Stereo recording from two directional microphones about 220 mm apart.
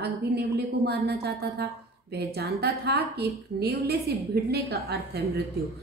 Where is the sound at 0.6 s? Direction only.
45° right (ahead or behind).